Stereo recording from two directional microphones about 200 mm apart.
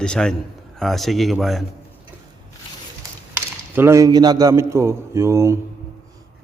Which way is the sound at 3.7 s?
15° right (ahead or behind).